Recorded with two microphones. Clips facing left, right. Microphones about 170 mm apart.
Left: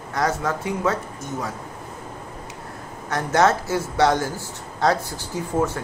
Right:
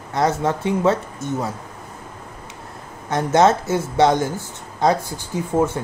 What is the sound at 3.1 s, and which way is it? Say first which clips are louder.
Speech: right 3 dB; 20° right (ahead or behind).